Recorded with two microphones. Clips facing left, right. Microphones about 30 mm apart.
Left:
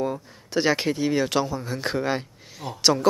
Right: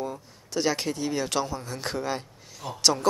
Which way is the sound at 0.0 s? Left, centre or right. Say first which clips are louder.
Left 6 dB; left.